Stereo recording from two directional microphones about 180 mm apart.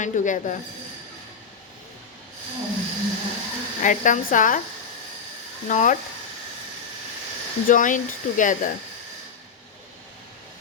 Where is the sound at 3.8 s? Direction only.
45° left (ahead or behind).